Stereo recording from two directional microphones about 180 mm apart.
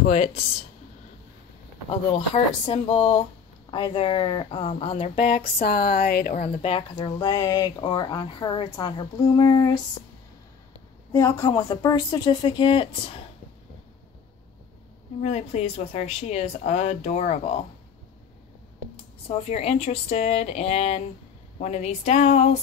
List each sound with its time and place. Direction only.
0.1 s speech: 35° left (ahead or behind)
1.9 s speech: 30° left (ahead or behind)
5.4 s speech: 55° left (ahead or behind)
7.0 s speech: 20° left (ahead or behind)
11.1 s speech: 20° left (ahead or behind)
15.2 s speech: 35° left (ahead or behind)
19.2 s speech: 35° left (ahead or behind)